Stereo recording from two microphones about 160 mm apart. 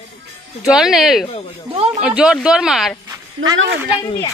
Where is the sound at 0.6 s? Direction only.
5° right (ahead or behind).